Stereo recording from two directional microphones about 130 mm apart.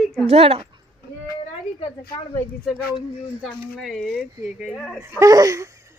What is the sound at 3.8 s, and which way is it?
Speech, centre (ahead or behind).